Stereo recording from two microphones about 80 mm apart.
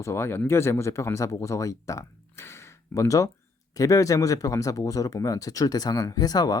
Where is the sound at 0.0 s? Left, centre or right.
Left.